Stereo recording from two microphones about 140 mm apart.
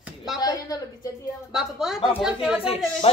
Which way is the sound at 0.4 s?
30° left (ahead or behind).